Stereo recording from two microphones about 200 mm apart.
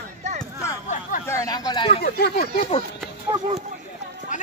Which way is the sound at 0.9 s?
40° left (ahead or behind).